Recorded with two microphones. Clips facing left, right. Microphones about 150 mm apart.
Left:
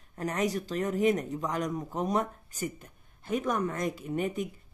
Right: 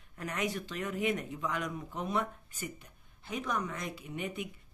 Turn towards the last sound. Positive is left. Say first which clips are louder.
# left 7 dB
turn(degrees=45)  # may be behind; listen again after turning